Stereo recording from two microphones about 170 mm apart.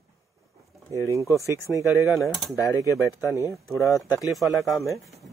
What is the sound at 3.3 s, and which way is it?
Speech, 20° left (ahead or behind).